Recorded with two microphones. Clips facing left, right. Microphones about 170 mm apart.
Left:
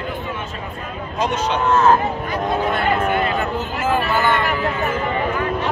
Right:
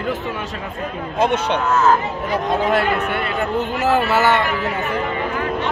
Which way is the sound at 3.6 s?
75° right (ahead or behind).